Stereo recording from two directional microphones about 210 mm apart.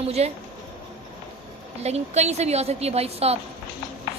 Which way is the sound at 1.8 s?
30° right (ahead or behind).